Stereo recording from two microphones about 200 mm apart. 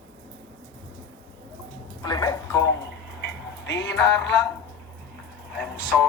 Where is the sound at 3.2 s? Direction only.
60° left (ahead or behind).